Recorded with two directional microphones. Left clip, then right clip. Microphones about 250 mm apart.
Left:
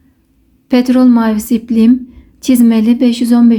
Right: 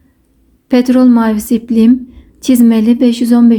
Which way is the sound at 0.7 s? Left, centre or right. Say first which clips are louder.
Right 1 dB; centre.